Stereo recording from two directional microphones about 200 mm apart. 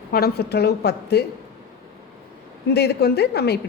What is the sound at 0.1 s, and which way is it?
A man's voice, 50° left (ahead or behind).